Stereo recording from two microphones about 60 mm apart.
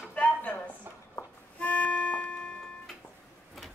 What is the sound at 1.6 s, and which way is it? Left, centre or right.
Music, left.